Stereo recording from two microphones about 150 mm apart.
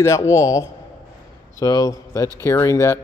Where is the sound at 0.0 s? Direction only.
20° left (ahead or behind).